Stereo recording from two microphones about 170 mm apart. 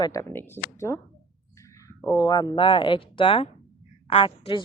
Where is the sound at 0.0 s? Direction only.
20° left (ahead or behind).